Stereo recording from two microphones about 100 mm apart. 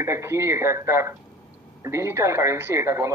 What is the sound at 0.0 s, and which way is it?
Speech, 25° right (ahead or behind).